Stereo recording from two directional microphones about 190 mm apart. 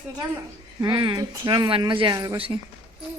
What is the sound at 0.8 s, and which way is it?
Speech, 25° right (ahead or behind).